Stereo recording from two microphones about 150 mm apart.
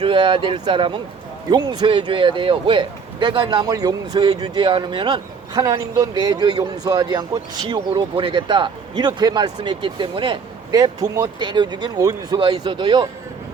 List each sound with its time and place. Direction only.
0.0 s speech: 35° right (ahead or behind)